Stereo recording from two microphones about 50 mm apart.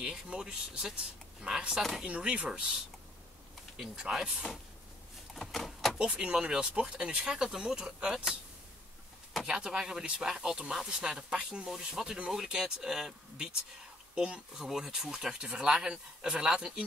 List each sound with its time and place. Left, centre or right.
0.0 s speech: centre
1.8 s speech: centre
2.0 s speech: right
3.7 s speech: centre
5.3 s a sound: centre
5.9 s speech: centre
9.5 s speech: centre